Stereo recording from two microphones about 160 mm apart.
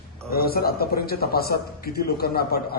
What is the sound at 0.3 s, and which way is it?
A man's voice, 70° left (ahead or behind).